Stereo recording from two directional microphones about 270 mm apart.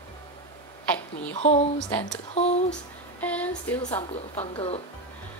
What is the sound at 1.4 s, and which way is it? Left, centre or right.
A woman's voice, left.